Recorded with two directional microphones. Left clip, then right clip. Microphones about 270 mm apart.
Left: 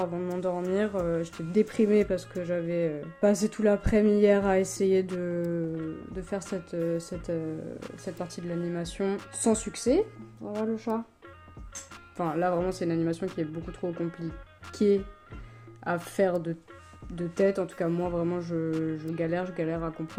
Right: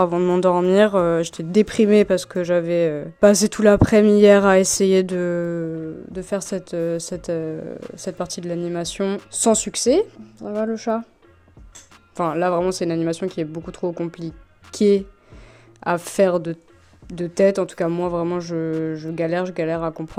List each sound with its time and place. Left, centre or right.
0.0 s speech: right
12.1 s speech: right